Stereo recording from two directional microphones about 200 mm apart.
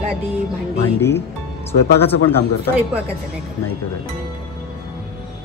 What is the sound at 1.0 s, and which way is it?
Speech, 10° left (ahead or behind).